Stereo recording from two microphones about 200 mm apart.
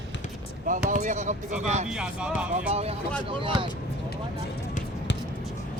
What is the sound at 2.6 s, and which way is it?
Speech, 30° right (ahead or behind).